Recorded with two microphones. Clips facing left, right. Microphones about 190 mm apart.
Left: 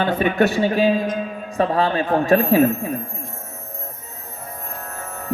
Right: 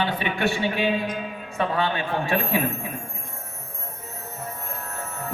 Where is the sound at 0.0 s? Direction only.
45° left (ahead or behind).